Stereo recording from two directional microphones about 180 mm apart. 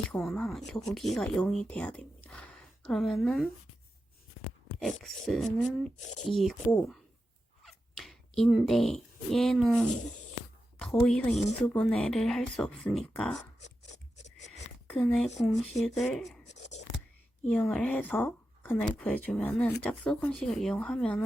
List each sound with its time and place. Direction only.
0.1 s speech: 5° left (ahead or behind)
4.8 s a woman's voice: centre (ahead or behind)
14.8 s speech: 5° left (ahead or behind)
16.5 s a sound: 40° left (ahead or behind)
17.5 s speech: 5° left (ahead or behind)